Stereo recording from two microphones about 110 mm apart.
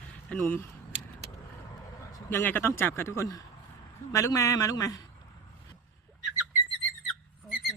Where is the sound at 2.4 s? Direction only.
20° left (ahead or behind); by 5.0 s 35° left (ahead or behind).